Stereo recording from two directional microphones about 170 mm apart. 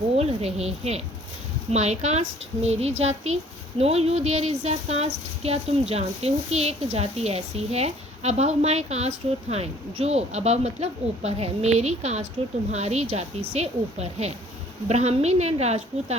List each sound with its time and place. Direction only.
0.2 s speech: 35° right (ahead or behind)